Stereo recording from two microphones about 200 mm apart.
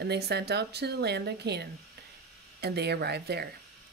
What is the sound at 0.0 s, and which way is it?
Speech, 55° right (ahead or behind).